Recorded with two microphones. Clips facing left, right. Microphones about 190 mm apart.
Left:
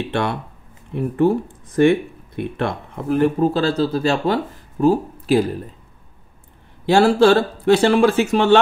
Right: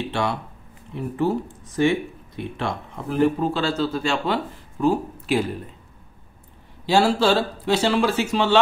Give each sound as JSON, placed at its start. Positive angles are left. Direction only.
{"t": 0.1, "sound": "speech", "side_deg": 55}
{"t": 6.9, "sound": "speech", "side_deg": 55}